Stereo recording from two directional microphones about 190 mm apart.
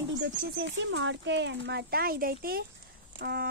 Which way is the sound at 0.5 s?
70° right (ahead or behind).